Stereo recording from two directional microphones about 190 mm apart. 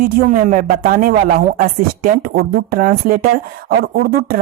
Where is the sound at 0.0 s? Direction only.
40° right (ahead or behind).